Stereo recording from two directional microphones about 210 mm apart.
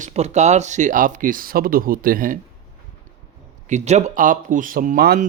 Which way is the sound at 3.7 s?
35° right (ahead or behind).